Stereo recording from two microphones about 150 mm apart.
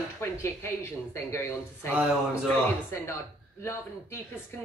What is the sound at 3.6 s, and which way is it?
Speech, 15° left (ahead or behind).